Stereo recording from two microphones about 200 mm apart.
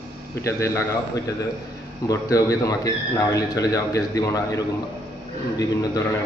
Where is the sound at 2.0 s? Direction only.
15° left (ahead or behind).